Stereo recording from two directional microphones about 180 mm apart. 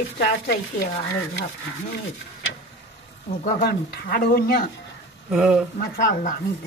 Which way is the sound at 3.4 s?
55° left (ahead or behind).